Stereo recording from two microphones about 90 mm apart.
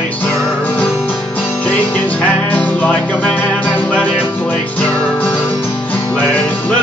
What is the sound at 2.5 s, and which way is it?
Music, 15° left (ahead or behind).